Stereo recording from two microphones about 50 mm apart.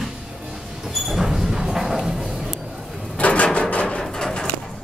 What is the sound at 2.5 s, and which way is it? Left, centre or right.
Vehicle, centre.